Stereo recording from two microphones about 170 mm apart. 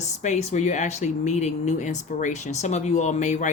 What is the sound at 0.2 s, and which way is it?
Speech, 45° left (ahead or behind).